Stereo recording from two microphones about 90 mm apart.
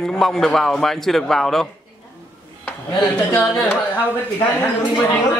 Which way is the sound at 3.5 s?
20° left (ahead or behind).